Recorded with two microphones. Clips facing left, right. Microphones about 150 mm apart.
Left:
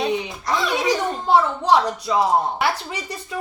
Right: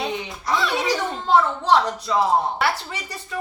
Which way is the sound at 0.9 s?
15° left (ahead or behind).